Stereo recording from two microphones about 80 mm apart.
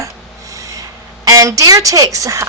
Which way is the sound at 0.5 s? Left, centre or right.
Right.